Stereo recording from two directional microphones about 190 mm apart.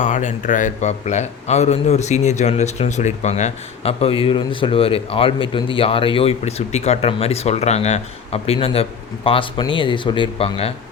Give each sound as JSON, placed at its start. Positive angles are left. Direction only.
{"t": 0.0, "sound": "a man's voice", "side_deg": 40}